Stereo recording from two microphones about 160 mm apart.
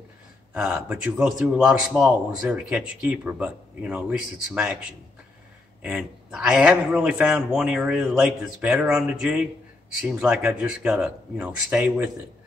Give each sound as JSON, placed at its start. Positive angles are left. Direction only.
{"t": 0.6, "sound": "a man's voice", "side_deg": -5}
{"t": 5.8, "sound": "a man's voice", "side_deg": -5}